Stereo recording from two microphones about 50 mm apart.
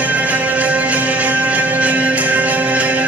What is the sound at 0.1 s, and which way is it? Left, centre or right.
Music, right.